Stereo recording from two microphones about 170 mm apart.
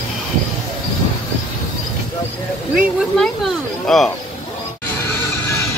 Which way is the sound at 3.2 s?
Centre (ahead or behind).